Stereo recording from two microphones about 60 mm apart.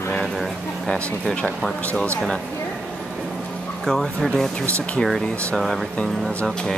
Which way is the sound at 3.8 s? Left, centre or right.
Centre.